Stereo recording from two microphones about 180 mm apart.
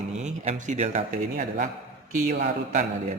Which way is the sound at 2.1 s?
45° right (ahead or behind).